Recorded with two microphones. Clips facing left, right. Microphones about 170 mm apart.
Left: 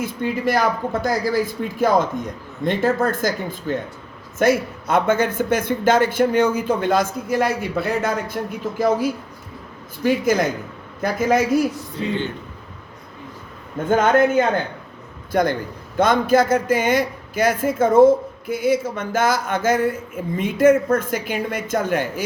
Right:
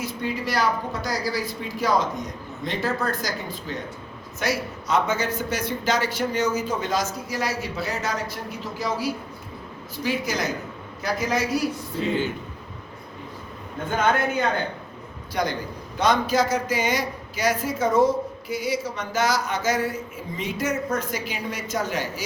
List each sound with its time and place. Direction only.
0.0 s a woman's voice: 50° left (ahead or behind)
14.1 s a woman's voice: 50° left (ahead or behind)